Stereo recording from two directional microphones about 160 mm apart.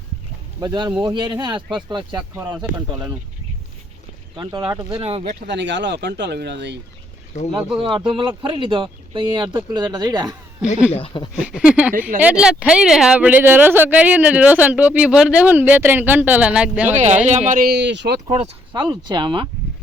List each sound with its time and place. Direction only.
0.6 s speech: 25° right (ahead or behind)
2.3 s speech: 15° right (ahead or behind)
4.4 s speech: 30° right (ahead or behind)
5.5 s speech: 90° right
7.3 s speech: 45° left (ahead or behind)
7.8 s speech: 30° right (ahead or behind)
10.9 s speech: 30° left (ahead or behind)
11.3 s speech: 5° right (ahead or behind)
16.9 s speech: 45° right (ahead or behind)
17.6 s speech: 90° right
18.3 s speech: 45° right (ahead or behind)
18.7 s speech: 25° right (ahead or behind)